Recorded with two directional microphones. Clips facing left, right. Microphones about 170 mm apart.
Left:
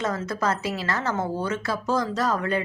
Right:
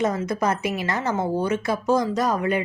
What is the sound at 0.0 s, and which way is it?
Speech, 15° right (ahead or behind).